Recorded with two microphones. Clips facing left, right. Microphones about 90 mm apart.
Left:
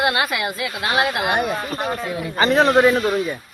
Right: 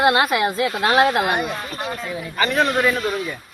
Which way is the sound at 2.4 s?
30° left (ahead or behind).